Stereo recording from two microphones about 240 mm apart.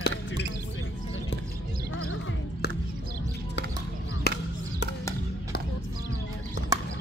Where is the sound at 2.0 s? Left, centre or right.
Left.